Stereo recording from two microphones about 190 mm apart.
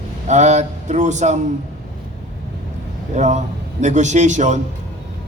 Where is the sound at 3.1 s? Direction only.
40° right (ahead or behind).